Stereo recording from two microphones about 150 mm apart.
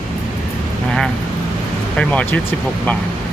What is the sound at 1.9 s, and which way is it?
Speech, 10° left (ahead or behind).